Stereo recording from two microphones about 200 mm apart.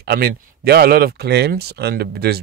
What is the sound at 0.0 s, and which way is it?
Speech, 50° right (ahead or behind).